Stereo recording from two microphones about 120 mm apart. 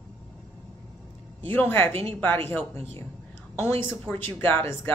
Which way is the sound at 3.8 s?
15° left (ahead or behind).